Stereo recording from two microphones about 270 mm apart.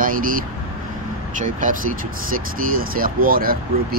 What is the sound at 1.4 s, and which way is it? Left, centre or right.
Speech, right.